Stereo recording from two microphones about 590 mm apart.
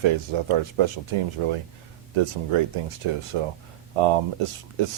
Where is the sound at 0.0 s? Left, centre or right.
Right.